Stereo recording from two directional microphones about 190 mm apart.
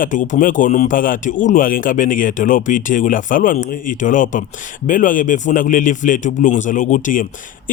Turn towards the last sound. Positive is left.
turn(degrees=45)  # may be behind; listen again after turning